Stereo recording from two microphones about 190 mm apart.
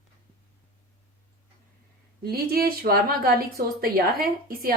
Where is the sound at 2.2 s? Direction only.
55° right (ahead or behind).